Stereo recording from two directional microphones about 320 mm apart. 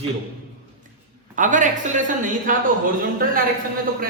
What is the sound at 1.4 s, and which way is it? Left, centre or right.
Speech, right.